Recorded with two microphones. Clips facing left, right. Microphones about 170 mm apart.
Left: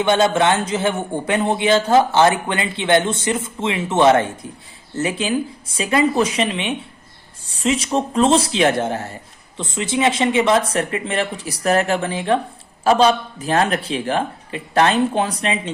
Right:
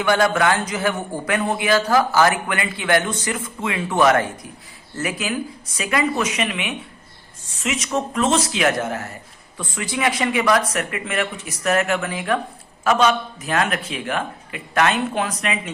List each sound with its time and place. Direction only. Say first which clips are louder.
0.0 s a man's voice: left 2 dB; 25° left (ahead or behind)